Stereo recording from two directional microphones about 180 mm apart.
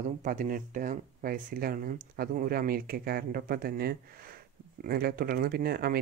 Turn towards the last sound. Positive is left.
turn(degrees=-60)  # may be behind; listen again after turning